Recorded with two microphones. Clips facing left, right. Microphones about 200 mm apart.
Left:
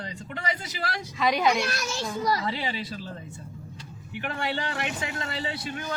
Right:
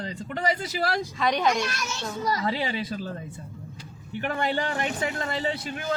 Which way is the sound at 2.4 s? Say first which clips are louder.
Right 3 dB; 50° right (ahead or behind).